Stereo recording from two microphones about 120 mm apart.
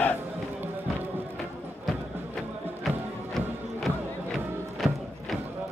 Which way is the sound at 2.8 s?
Centre (ahead or behind).